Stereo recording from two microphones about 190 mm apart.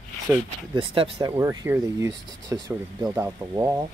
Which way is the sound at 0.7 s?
30° right (ahead or behind).